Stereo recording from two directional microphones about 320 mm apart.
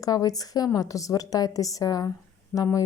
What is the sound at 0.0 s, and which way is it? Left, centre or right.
A woman's voice, centre.